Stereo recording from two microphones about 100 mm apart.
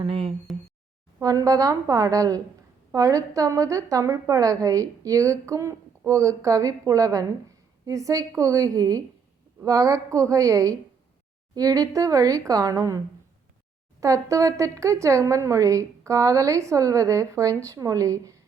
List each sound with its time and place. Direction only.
0.0 s speech: 70° right (ahead or behind)
1.2 s a woman's voice: 35° right (ahead or behind)
14.0 s a woman's voice: 35° right (ahead or behind)